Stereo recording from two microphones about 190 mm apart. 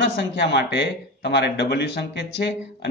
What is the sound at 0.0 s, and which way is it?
Speech, 60° left (ahead or behind).